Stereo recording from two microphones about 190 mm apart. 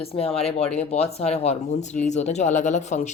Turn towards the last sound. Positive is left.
turn(degrees=40)  # may be behind; listen again after turning